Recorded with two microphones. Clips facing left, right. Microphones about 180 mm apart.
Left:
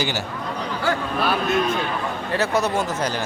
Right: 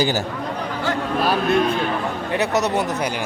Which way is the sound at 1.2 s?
40° right (ahead or behind).